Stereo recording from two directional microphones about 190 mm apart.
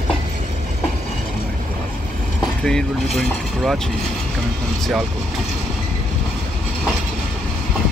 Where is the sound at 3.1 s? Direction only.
Centre (ahead or behind).